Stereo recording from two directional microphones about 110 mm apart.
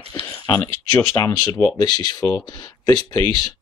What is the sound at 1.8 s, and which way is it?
Speech, 40° left (ahead or behind).